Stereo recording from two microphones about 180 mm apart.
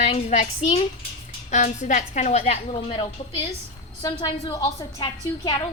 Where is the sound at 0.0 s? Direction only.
35° left (ahead or behind).